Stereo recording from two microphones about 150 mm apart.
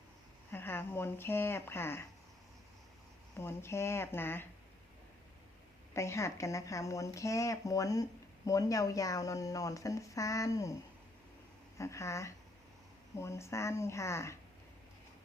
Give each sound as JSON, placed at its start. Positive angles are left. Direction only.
{"t": 0.5, "sound": "speech", "side_deg": 15}
{"t": 3.3, "sound": "speech", "side_deg": 15}
{"t": 5.9, "sound": "speech", "side_deg": 20}
{"t": 11.8, "sound": "speech", "side_deg": 20}